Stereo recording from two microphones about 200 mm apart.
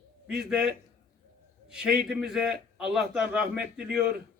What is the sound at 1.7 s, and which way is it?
A man's voice, 5° right (ahead or behind).